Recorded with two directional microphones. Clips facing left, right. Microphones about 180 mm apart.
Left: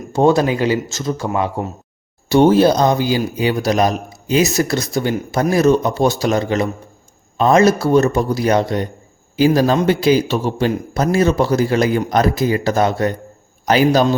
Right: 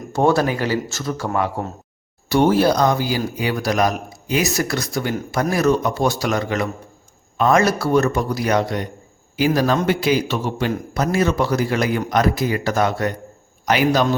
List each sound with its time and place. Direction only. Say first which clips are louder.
0.1 s a man's voice: left 3 dB; 20° left (ahead or behind)